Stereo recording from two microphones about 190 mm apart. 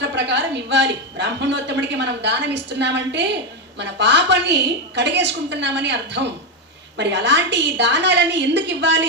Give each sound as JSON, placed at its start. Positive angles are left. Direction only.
{"t": 0.0, "sound": "a woman's voice", "side_deg": -65}